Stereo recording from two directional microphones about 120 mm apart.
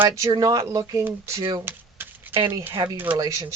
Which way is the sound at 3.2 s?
25° right (ahead or behind).